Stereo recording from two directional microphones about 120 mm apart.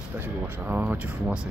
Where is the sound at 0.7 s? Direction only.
10° right (ahead or behind).